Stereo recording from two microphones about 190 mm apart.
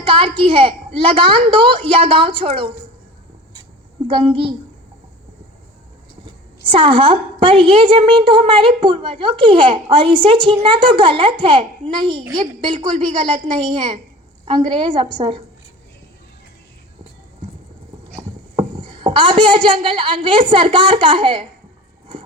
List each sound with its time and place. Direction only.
0.0 s a woman's voice: 25° right (ahead or behind)
4.0 s a woman's voice: 30° right (ahead or behind)
6.7 s a woman's voice: 25° right (ahead or behind)
18.2 s speech: 25° right (ahead or behind)